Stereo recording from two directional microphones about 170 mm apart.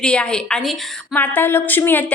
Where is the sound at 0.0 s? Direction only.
5° left (ahead or behind).